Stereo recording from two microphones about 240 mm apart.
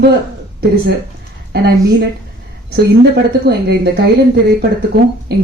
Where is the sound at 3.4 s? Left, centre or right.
Right.